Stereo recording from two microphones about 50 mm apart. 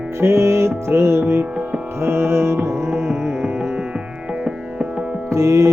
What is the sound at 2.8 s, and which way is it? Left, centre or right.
Music, centre.